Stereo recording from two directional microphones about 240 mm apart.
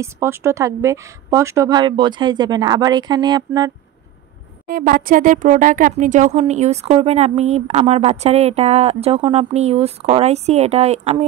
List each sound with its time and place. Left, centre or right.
0.0 s speech: centre
4.6 s speech: right